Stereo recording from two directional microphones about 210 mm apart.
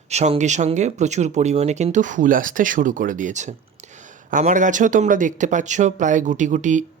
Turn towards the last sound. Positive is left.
turn(degrees=-35)  # may be behind; listen again after turning